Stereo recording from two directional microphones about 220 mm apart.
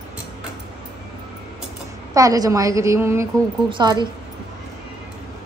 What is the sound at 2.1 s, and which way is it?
A woman's voice, 15° right (ahead or behind).